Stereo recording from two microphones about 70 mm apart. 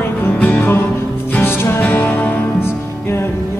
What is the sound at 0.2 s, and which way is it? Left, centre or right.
Music, left.